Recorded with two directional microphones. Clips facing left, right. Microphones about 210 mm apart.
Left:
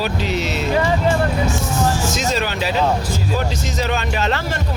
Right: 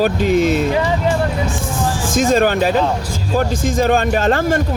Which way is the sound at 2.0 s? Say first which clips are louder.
Right 7 dB; 50° right (ahead or behind).